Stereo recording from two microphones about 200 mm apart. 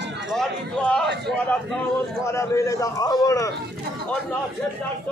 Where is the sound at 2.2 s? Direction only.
15° left (ahead or behind).